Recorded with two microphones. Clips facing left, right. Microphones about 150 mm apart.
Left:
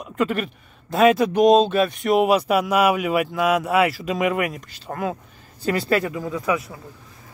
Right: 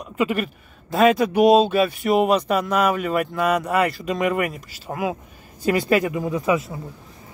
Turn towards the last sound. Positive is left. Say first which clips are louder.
# right 3 dB
turn(degrees=-25)  # may be behind; listen again after turning